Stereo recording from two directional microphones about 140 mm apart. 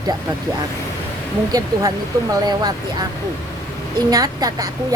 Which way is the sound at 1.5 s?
25° right (ahead or behind).